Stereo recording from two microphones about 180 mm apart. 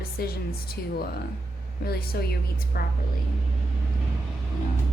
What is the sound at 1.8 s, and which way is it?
Speech, 60° left (ahead or behind).